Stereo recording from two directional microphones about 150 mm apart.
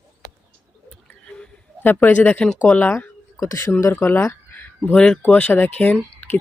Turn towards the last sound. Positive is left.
turn(degrees=10)  # may be behind; listen again after turning